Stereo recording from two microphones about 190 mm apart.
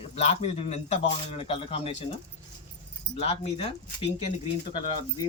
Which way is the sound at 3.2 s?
30° left (ahead or behind).